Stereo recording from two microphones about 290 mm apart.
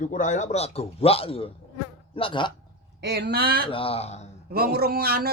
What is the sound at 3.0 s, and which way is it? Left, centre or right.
Speech, right.